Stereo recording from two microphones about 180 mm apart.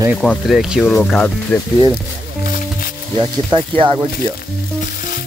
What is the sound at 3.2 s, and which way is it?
Speech, 25° right (ahead or behind).